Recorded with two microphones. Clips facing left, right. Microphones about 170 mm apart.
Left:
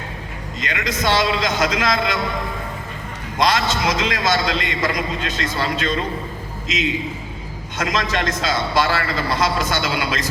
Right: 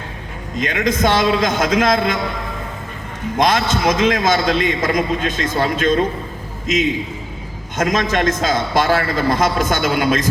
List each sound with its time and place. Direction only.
0.5 s a man's voice: 50° right (ahead or behind)
3.3 s a man's voice: 50° right (ahead or behind)
7.8 s a man's voice: 50° right (ahead or behind)